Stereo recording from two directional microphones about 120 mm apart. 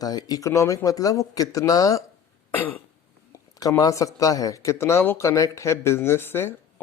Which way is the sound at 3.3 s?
30° left (ahead or behind).